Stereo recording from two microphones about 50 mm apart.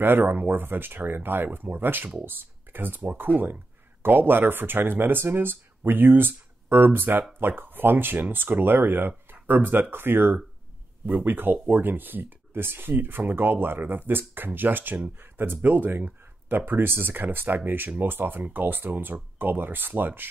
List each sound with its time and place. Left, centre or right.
0.0 s speech: right